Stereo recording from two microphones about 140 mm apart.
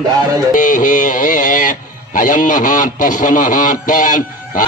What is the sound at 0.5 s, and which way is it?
Speech, 70° left (ahead or behind).